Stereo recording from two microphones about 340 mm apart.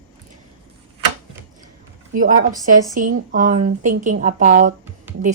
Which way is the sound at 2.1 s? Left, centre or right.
Right.